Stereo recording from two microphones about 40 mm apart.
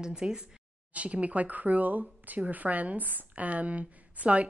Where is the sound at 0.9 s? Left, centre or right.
Right.